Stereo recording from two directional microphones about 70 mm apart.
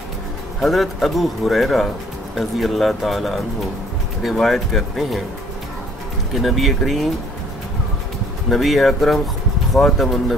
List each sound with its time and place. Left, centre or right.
0.6 s speech: centre
6.3 s speech: centre
8.5 s speech: centre